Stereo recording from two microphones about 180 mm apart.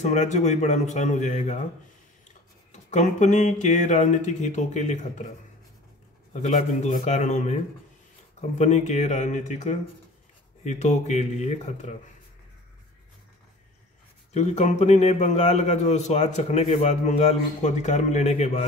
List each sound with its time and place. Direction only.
0.0 s a man's voice: 40° left (ahead or behind)
2.7 s a man's voice: 40° left (ahead or behind)
6.3 s a man's voice: 40° left (ahead or behind)
14.3 s a man's voice: 40° left (ahead or behind)